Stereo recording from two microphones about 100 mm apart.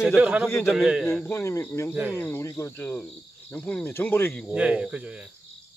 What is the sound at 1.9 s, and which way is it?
Speech, 15° right (ahead or behind).